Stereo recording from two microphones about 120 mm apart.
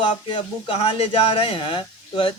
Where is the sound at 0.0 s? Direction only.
40° left (ahead or behind).